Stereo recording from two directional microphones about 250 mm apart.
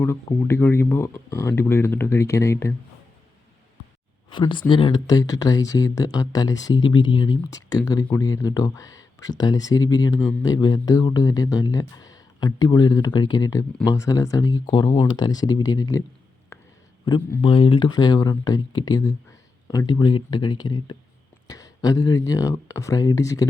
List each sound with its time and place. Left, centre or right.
0.0 s speech: centre
4.3 s speech: centre
16.5 s a sound: centre
17.1 s speech: centre